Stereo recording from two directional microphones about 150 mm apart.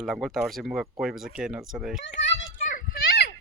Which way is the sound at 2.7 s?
85° left.